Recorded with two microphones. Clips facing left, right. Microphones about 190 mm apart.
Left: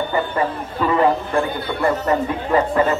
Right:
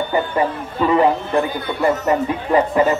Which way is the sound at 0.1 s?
15° right (ahead or behind).